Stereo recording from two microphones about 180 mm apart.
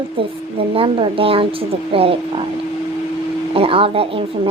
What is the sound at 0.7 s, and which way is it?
A woman's voice, 30° right (ahead or behind).